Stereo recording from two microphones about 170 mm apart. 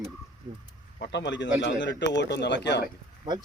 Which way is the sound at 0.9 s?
75° left (ahead or behind).